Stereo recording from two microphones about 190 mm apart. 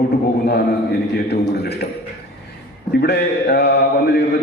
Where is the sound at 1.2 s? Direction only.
60° left (ahead or behind).